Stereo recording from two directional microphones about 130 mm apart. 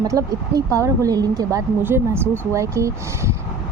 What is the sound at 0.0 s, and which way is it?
A woman's voice, 25° right (ahead or behind).